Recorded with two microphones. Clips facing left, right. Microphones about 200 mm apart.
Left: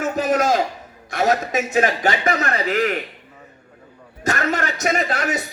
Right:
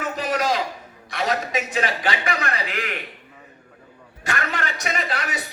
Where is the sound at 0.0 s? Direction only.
45° left (ahead or behind).